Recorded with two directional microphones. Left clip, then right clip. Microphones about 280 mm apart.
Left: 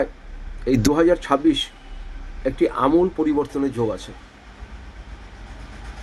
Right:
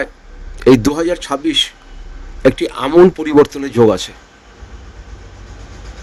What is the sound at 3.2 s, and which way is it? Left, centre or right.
Speech, right.